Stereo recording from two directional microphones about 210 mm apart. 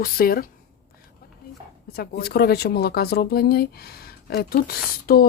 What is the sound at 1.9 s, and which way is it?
Speech, 45° left (ahead or behind).